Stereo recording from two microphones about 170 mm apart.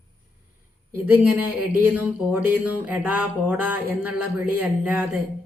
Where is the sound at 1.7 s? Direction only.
10° right (ahead or behind).